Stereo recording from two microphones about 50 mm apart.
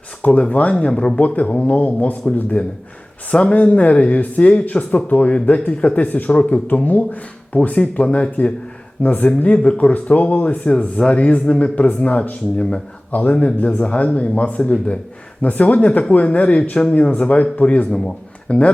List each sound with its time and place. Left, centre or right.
0.3 s speech: left
17.9 s speech: centre